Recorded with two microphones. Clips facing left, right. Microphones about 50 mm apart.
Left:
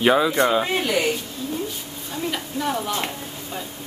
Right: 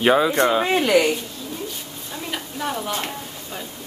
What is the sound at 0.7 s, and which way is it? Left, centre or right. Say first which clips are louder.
Speech: right 4 dB; right.